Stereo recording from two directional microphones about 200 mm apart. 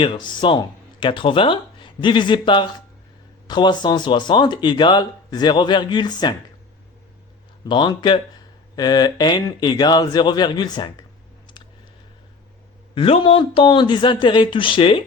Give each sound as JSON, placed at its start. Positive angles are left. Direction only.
{"t": 0.0, "sound": "speech", "side_deg": 25}
{"t": 7.6, "sound": "speech", "side_deg": 20}
{"t": 12.9, "sound": "speech", "side_deg": 25}